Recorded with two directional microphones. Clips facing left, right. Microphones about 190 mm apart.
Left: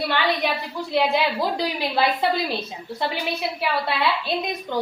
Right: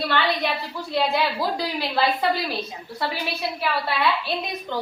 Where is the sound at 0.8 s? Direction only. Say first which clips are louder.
Left 2 dB; 15° left (ahead or behind).